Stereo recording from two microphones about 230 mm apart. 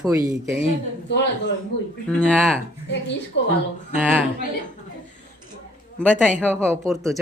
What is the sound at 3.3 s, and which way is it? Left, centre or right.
Speech, left.